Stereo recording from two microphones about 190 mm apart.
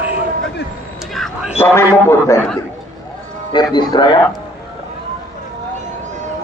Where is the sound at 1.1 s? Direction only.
Centre (ahead or behind).